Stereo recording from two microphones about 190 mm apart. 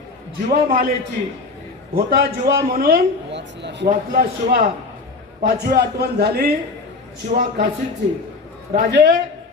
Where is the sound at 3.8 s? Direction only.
50° right (ahead or behind).